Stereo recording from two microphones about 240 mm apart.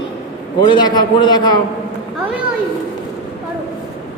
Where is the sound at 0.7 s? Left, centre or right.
Centre.